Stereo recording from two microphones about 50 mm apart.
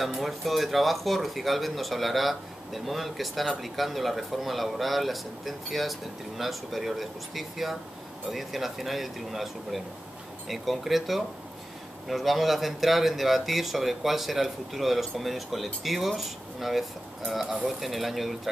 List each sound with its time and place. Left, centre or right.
0.0 s speech: centre